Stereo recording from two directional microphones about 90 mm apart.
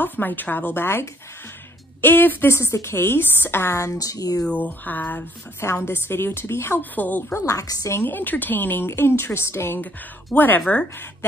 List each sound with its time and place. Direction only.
0.0 s a woman's voice: 20° left (ahead or behind); by 4.5 s 40° left (ahead or behind)
4.5 s a woman's voice: 20° left (ahead or behind)
7.3 s a woman's voice: 40° left (ahead or behind)
7.9 s a woman's voice: 25° left (ahead or behind)